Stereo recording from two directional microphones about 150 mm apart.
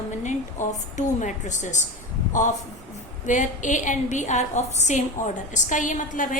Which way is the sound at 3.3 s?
55° left (ahead or behind).